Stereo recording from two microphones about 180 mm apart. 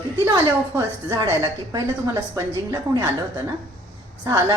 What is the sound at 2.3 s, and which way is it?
Speech, 20° right (ahead or behind).